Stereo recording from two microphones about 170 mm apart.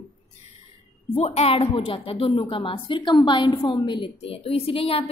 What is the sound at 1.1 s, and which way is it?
Speech, 40° left (ahead or behind).